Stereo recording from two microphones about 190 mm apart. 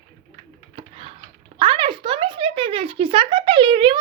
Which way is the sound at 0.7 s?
30° right (ahead or behind).